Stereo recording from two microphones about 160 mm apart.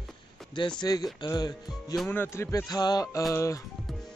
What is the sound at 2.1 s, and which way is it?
Speech, 15° left (ahead or behind).